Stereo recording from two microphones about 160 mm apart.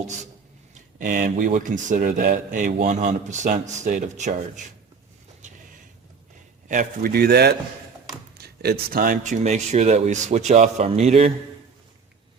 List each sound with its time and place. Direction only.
0.7 s speech: 55° right (ahead or behind)
2.3 s speech: 50° right (ahead or behind)
6.7 s speech: 60° right (ahead or behind); by 7.5 s 90° right
8.4 s speech: 75° right (ahead or behind); by 11.3 s 40° right (ahead or behind)